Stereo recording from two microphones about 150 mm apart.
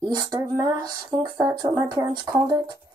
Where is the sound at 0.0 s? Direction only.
25° right (ahead or behind).